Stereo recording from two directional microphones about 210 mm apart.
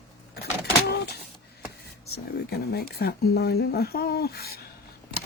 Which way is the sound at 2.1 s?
50° left (ahead or behind).